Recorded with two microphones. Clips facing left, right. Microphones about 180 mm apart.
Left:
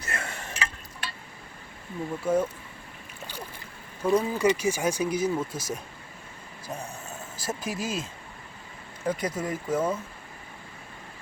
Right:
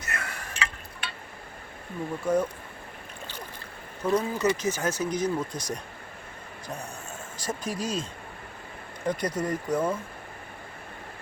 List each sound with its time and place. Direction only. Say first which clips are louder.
0.0 s a sound: left 1 dB; 25° left (ahead or behind)
0.5 s a sound: even; 40° left (ahead or behind)
2.2 s speech: even; 5° left (ahead or behind)
4.0 s speech: left 2 dB; 10° left (ahead or behind)
7.3 s speech: even; 5° left (ahead or behind)
9.0 s speech: right 1 dB; 5° left (ahead or behind)